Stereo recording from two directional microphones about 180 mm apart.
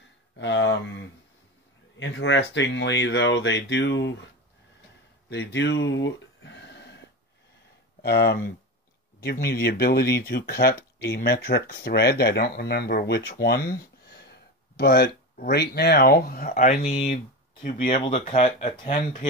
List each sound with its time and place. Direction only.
0.0 s a sound: 90° left
2.0 s speech: 90° left
5.3 s speech: 75° left (ahead or behind)
8.0 s speech: 60° left (ahead or behind)
14.8 s speech: 65° left (ahead or behind)
17.0 s speech: 35° left (ahead or behind)